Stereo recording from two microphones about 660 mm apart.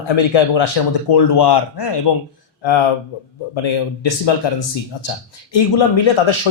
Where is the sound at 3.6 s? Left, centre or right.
Left.